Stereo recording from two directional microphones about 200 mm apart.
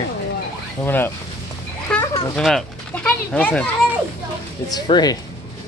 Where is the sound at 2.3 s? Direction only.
5° left (ahead or behind).